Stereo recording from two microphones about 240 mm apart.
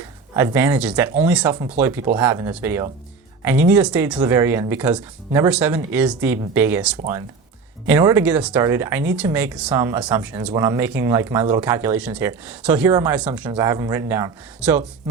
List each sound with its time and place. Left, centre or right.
0.3 s speech: centre